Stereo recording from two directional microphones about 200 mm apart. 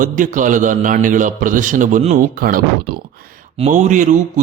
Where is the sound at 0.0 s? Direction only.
40° right (ahead or behind).